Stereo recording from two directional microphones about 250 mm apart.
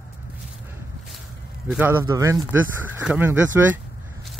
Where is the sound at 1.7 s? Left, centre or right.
Centre.